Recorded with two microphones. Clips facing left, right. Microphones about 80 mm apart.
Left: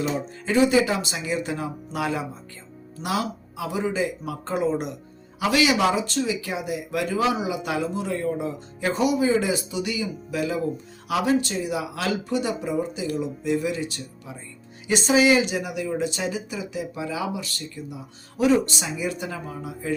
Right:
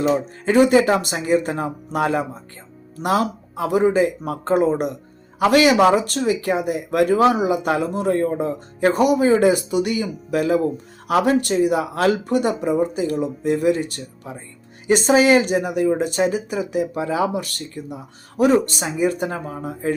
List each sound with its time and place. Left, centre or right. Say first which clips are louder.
0.0 s speech: right 7 dB; right